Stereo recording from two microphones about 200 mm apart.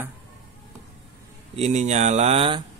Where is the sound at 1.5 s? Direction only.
35° right (ahead or behind).